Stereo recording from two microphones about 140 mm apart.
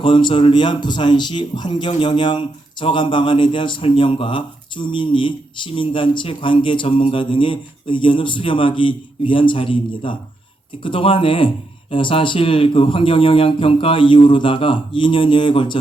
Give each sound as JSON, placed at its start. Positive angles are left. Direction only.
{"t": 0.0, "sound": "speech", "side_deg": 35}